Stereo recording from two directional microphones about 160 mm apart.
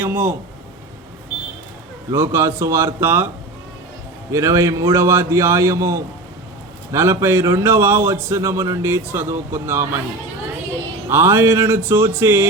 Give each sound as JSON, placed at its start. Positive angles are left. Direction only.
{"t": 0.0, "sound": "a man's voice", "side_deg": -10}
{"t": 2.0, "sound": "a man's voice", "side_deg": -15}
{"t": 4.3, "sound": "a man's voice", "side_deg": -20}
{"t": 11.1, "sound": "a man's voice", "side_deg": -15}